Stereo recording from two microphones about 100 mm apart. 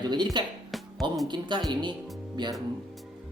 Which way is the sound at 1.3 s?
45° right (ahead or behind).